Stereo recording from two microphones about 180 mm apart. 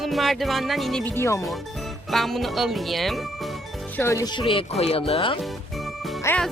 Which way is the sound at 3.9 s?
15° left (ahead or behind).